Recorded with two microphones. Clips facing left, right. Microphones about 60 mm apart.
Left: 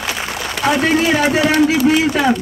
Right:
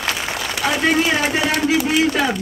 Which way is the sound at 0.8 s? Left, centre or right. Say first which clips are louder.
Left 1 dB; centre.